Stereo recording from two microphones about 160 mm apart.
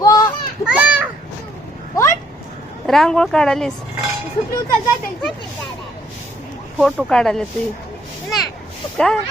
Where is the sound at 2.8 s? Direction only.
5° left (ahead or behind).